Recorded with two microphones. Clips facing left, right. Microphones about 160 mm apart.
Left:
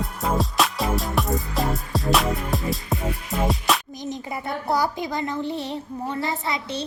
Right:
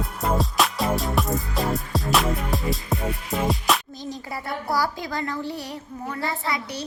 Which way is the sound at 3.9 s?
20° left (ahead or behind).